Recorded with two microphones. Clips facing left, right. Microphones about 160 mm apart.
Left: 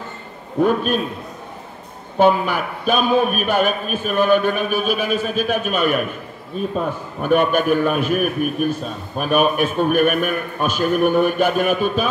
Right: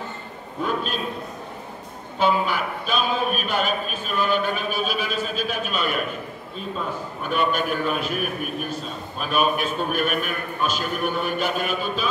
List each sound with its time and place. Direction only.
0.6 s a man's voice: 50° left (ahead or behind)
2.1 s a man's voice: 50° left (ahead or behind)
7.2 s a man's voice: 50° left (ahead or behind)